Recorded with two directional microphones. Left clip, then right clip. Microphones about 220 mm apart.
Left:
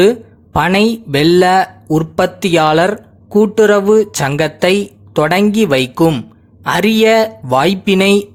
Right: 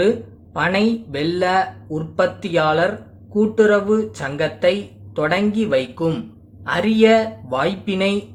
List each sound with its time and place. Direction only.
0.5 s speech: 45° left (ahead or behind)